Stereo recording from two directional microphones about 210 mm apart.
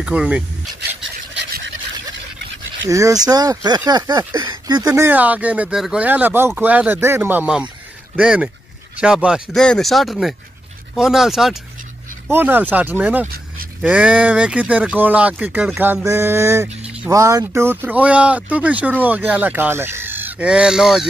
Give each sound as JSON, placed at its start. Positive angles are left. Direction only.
{"t": 0.0, "sound": "speech", "side_deg": -5}
{"t": 1.4, "sound": "a sound", "side_deg": -55}
{"t": 2.9, "sound": "speech", "side_deg": -15}
{"t": 4.8, "sound": "speech", "side_deg": -10}